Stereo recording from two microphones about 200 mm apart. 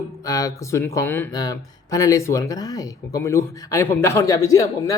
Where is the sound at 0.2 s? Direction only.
15° left (ahead or behind).